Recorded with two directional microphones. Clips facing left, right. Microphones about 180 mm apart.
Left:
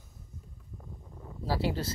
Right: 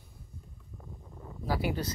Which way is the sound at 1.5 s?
25° left (ahead or behind).